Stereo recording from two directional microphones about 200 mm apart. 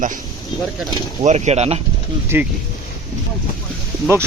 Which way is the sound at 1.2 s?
35° right (ahead or behind).